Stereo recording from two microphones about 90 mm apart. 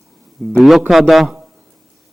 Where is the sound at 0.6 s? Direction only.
Centre (ahead or behind).